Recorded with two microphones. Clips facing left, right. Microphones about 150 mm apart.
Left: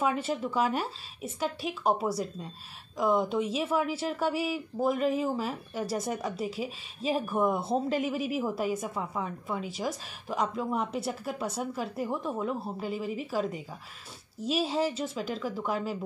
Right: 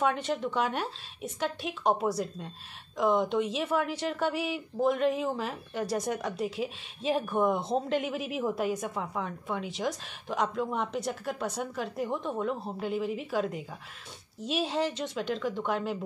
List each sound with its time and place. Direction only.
0.0 s speech: 5° left (ahead or behind)